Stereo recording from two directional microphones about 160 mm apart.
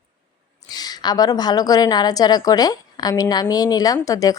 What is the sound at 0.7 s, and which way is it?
A woman's voice, 25° left (ahead or behind).